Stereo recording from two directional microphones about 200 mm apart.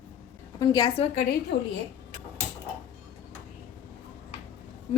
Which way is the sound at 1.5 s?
55° left (ahead or behind).